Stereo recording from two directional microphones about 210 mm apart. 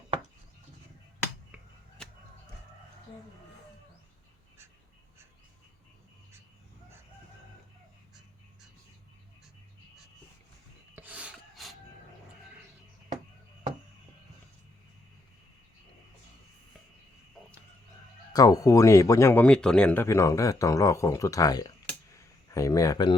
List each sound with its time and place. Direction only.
10.9 s filing: 5° right (ahead or behind)
18.3 s speech: 15° left (ahead or behind)
21.8 s a sound: 15° left (ahead or behind)